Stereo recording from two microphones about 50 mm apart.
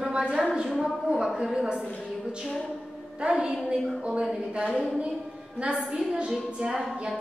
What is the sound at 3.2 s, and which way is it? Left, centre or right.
A woman's voice, centre.